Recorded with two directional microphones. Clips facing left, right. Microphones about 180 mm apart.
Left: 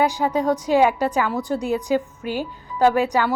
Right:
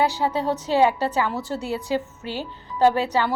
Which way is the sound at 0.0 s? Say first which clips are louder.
Left 2 dB; 15° left (ahead or behind).